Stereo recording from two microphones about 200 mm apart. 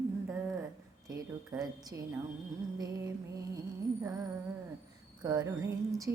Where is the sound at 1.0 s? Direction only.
20° right (ahead or behind).